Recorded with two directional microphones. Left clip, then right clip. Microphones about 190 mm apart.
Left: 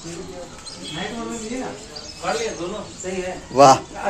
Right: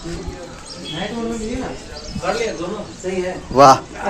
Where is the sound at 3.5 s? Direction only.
Centre (ahead or behind).